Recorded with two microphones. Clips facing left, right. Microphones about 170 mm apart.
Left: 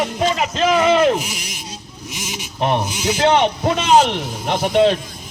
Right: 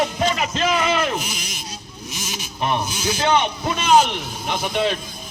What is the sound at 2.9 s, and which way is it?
Speech, 85° left.